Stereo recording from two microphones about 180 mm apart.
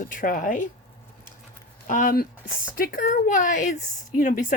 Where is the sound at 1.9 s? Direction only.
50° left (ahead or behind).